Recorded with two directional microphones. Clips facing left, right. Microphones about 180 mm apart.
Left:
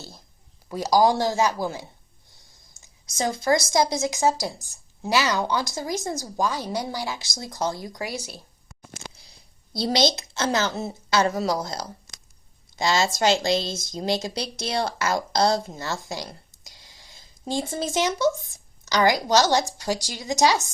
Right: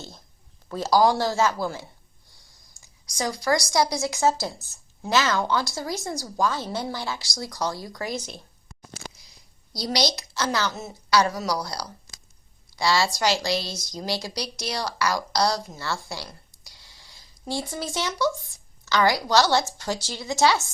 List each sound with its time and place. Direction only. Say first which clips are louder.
0.7 s speech: left 1 dB; 15° left (ahead or behind)
9.7 s a woman's voice: left 4 dB; 25° left (ahead or behind)